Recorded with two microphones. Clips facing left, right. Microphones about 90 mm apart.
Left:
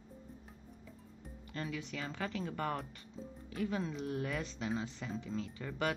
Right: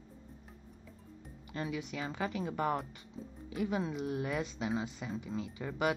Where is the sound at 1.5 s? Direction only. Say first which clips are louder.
Right 3 dB; 15° right (ahead or behind).